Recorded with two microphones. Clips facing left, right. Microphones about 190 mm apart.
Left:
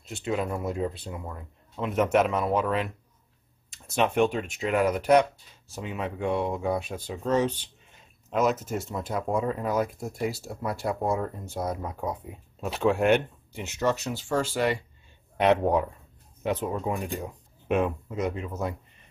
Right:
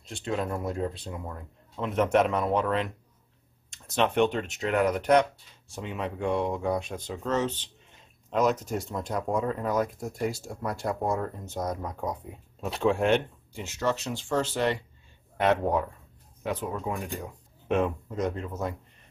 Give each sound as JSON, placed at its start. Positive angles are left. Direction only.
{"t": 0.0, "sound": "speech", "side_deg": 5}
{"t": 13.5, "sound": "speech", "side_deg": 15}
{"t": 17.6, "sound": "speech", "side_deg": 5}